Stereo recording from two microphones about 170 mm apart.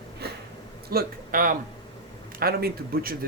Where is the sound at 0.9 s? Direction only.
60° right (ahead or behind).